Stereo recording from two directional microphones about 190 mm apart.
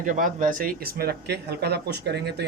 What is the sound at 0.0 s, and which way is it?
Speech, 45° right (ahead or behind).